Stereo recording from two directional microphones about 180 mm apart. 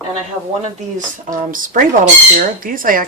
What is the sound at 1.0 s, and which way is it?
Speech, 45° right (ahead or behind).